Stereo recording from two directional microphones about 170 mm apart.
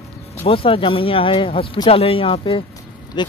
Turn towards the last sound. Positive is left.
turn(degrees=25)  # may be behind; listen again after turning